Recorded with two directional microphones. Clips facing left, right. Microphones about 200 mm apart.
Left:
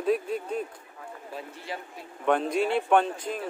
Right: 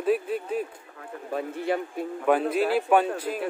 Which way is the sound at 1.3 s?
55° right (ahead or behind).